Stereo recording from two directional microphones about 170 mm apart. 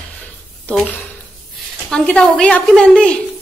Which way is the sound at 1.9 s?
5° left (ahead or behind).